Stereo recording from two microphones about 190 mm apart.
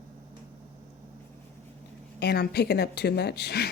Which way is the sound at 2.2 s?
60° left (ahead or behind).